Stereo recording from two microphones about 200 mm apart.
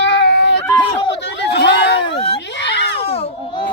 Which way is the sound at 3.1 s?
25° left (ahead or behind).